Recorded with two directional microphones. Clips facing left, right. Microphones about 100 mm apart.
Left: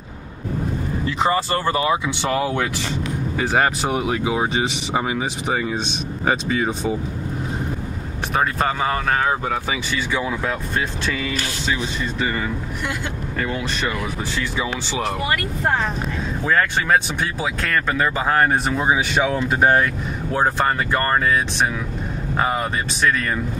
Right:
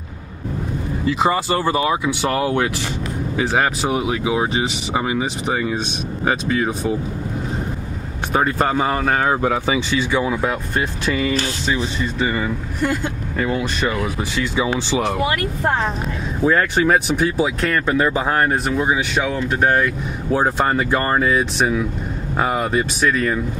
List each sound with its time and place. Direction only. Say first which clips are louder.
1.0 s speech: right 2 dB; 10° right (ahead or behind)
3.3 s speech: right 1 dB; 5° right (ahead or behind)
6.2 s speech: right 1 dB; 5° left (ahead or behind)
8.3 s speech: right 3 dB; 5° right (ahead or behind)
13.4 s speech: right 4 dB; 10° right (ahead or behind)
16.4 s speech: right 4 dB; 10° right (ahead or behind)
20.3 s speech: right 1 dB; 10° right (ahead or behind)